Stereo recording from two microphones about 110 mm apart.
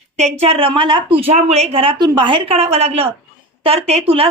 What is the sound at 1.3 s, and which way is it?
A woman's voice, 80° right.